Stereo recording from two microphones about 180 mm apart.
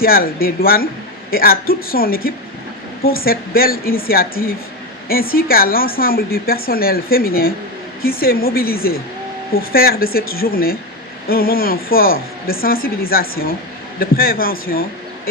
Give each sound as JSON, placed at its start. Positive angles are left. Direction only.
{"t": 0.0, "sound": "a woman's voice", "side_deg": 55}